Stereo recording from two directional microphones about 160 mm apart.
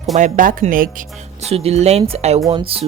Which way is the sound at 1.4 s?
40° right (ahead or behind).